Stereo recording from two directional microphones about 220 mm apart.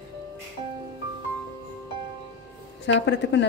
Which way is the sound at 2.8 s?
55° left (ahead or behind).